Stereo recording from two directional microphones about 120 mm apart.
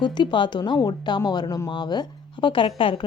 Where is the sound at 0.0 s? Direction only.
40° left (ahead or behind).